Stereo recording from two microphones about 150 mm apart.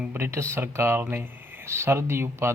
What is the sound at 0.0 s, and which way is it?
Speech, 15° right (ahead or behind).